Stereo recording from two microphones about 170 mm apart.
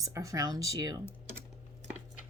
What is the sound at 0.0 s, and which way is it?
Speech, 20° right (ahead or behind).